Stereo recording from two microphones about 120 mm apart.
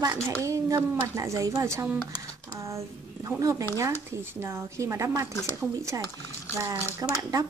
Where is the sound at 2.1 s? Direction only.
25° right (ahead or behind).